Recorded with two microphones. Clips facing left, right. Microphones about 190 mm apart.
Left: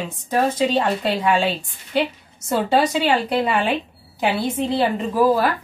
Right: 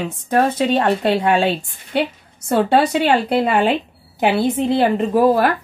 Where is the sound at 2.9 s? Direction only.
60° right (ahead or behind).